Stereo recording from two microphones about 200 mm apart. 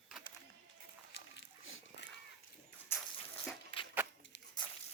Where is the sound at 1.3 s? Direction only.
75° left (ahead or behind).